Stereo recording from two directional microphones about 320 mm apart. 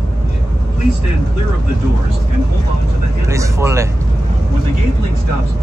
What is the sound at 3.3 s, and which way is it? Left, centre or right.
Speech, centre.